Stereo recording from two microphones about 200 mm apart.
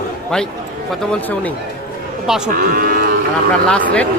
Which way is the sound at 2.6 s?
45° right (ahead or behind).